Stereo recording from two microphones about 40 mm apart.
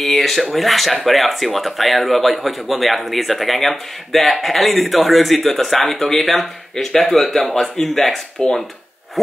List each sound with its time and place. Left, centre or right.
0.0 s speech: centre
8.4 s speech: centre